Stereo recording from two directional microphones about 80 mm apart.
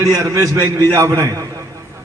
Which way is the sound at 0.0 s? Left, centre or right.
Right.